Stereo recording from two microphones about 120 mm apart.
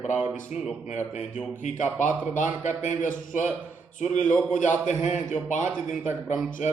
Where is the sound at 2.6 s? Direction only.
90° left.